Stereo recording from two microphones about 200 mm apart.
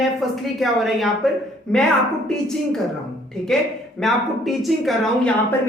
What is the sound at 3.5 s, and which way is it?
Speech, centre (ahead or behind).